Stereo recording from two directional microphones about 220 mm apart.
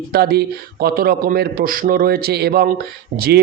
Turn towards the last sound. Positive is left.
turn(degrees=-45)  # may be behind; listen again after turning